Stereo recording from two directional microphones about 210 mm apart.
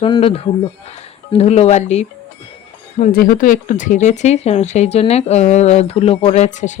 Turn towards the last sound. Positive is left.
turn(degrees=35)  # may be behind; listen again after turning